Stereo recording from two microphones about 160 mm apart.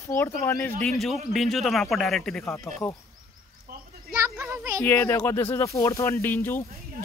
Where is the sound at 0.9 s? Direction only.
Centre (ahead or behind).